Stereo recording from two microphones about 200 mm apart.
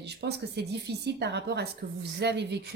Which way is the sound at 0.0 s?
55° right (ahead or behind).